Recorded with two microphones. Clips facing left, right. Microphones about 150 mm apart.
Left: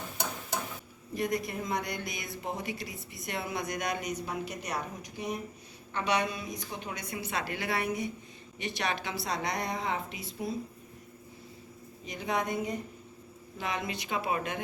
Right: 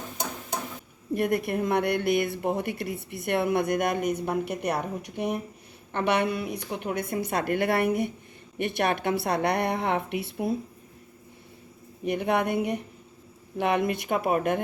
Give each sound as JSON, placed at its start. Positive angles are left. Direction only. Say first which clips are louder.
{"t": 1.1, "sound": "speech", "louder": "right 7 dB", "side_deg": -60}
{"t": 12.0, "sound": "speech", "louder": "right 7 dB", "side_deg": -60}